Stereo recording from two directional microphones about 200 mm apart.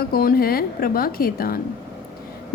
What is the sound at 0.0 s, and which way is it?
A woman's voice, 50° left (ahead or behind).